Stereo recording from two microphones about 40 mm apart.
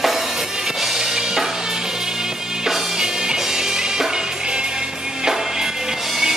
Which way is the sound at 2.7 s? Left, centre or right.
Centre.